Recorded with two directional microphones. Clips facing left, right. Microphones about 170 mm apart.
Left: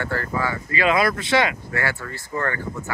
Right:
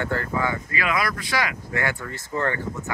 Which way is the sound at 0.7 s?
25° left (ahead or behind).